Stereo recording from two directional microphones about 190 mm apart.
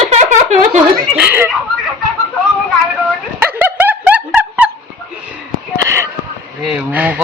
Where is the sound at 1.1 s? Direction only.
10° right (ahead or behind).